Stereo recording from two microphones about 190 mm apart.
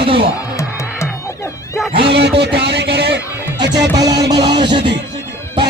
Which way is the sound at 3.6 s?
65° right (ahead or behind).